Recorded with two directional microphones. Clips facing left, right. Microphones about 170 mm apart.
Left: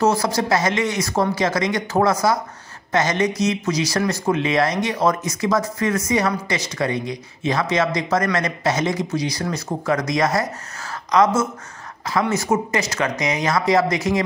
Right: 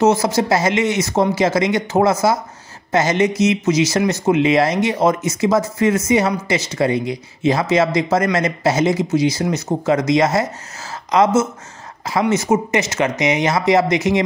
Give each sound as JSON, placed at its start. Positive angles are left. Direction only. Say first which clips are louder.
{"t": 0.0, "sound": "speech", "louder": "right 4 dB", "side_deg": -25}